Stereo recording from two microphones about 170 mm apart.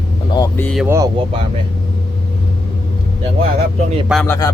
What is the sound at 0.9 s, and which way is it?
Speech, 20° right (ahead or behind).